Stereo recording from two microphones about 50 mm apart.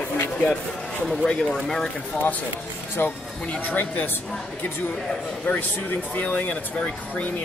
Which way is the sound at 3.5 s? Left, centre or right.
Left.